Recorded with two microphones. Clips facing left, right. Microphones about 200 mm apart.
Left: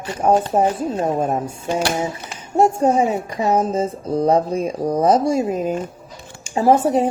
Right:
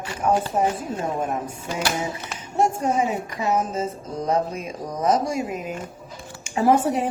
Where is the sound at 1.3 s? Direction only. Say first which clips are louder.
Left 6 dB; 30° left (ahead or behind).